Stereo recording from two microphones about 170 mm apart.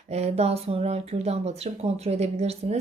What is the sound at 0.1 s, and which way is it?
Speech, 40° right (ahead or behind).